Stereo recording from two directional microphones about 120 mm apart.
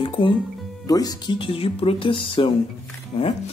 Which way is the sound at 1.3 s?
50° left (ahead or behind).